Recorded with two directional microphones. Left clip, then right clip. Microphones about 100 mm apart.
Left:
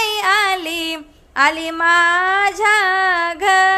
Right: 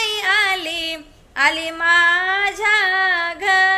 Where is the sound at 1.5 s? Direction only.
40° left (ahead or behind).